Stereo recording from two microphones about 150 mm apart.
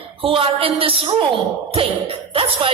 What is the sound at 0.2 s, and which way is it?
A man's voice, 35° right (ahead or behind).